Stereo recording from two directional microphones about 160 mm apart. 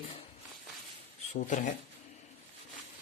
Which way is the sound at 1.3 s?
50° left (ahead or behind).